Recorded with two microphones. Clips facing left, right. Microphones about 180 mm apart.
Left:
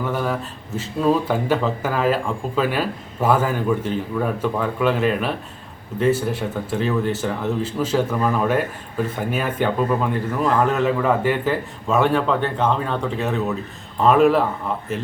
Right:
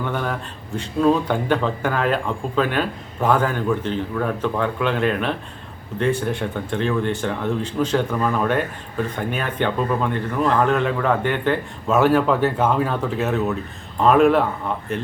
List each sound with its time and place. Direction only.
0.0 s speech: 5° left (ahead or behind)